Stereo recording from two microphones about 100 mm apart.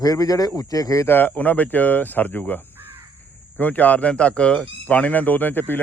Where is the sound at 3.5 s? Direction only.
15° left (ahead or behind).